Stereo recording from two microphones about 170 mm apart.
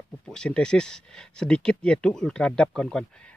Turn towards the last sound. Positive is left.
turn(degrees=5)  # may be behind; listen again after turning